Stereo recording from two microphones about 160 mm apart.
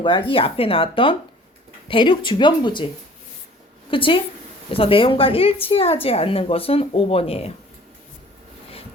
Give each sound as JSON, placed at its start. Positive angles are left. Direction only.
{"t": 0.0, "sound": "a woman's voice", "side_deg": 35}
{"t": 3.9, "sound": "a woman's voice", "side_deg": 35}